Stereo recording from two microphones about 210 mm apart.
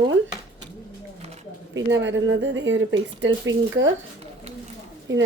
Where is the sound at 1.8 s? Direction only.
60° right (ahead or behind).